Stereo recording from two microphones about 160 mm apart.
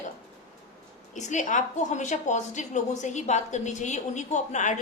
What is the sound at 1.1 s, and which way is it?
A woman's voice, 50° left (ahead or behind).